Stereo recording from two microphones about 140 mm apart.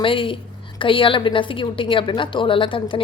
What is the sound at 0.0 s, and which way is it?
Speech, 40° left (ahead or behind).